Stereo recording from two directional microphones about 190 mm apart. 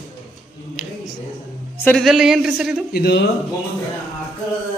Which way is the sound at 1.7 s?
5° left (ahead or behind).